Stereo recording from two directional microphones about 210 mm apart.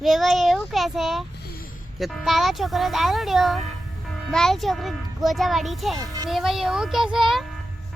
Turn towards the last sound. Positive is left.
turn(degrees=0)  # may be behind; listen again after turning